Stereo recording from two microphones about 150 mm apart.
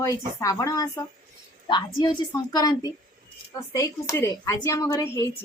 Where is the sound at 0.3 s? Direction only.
20° left (ahead or behind).